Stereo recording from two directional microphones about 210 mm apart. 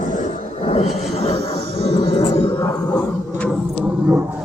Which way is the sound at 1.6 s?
50° right (ahead or behind).